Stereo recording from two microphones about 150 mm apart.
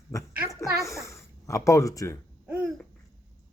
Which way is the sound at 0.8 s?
20° left (ahead or behind).